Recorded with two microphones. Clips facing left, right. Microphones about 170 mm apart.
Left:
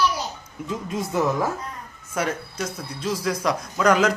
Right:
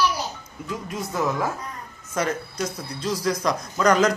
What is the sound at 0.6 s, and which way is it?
Speech, 20° left (ahead or behind).